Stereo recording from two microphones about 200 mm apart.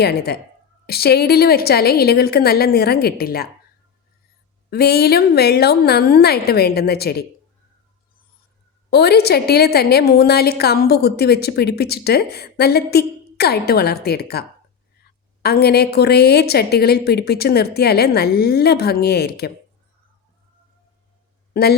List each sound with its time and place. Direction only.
0.0 s a woman's voice: 50° left (ahead or behind)
4.7 s a woman's voice: 55° left (ahead or behind)
8.9 s a woman's voice: 55° left (ahead or behind)
21.5 s speech: 50° left (ahead or behind)